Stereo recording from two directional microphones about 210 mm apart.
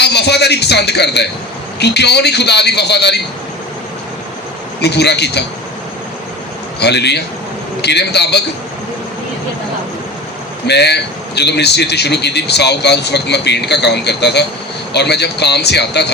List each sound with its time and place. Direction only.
0.0 s a man's voice: 55° left (ahead or behind)
4.8 s a man's voice: 50° left (ahead or behind)
6.7 s a man's voice: 50° left (ahead or behind)
10.7 s a man's voice: 55° left (ahead or behind)